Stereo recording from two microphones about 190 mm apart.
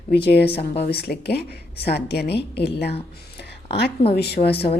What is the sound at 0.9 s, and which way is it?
A woman's voice, 55° left (ahead or behind).